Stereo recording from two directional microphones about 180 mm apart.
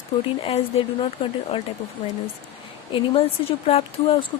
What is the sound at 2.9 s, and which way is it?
Speech, 30° left (ahead or behind).